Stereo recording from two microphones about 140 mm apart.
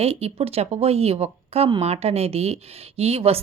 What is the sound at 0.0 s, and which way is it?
A woman's voice, 45° right (ahead or behind).